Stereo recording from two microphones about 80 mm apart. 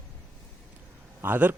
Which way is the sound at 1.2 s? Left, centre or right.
Right.